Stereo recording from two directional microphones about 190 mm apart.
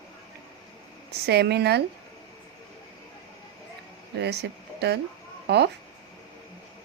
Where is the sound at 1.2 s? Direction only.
60° right (ahead or behind).